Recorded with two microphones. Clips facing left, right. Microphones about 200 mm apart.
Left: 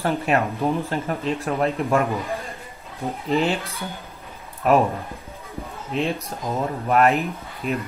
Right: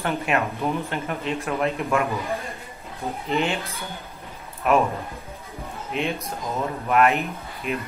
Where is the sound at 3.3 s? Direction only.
35° left (ahead or behind).